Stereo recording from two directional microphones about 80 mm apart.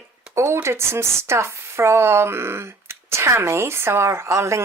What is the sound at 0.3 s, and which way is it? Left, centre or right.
Speech, right.